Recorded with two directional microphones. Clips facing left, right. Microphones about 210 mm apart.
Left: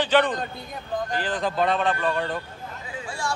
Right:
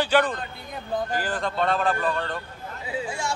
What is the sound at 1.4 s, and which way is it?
A man's voice, 5° left (ahead or behind).